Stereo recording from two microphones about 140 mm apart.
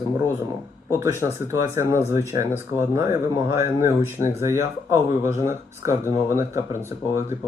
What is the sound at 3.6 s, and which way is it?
Speech, 20° right (ahead or behind).